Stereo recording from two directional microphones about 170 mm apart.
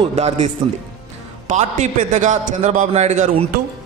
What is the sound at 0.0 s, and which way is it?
Speech, 40° right (ahead or behind).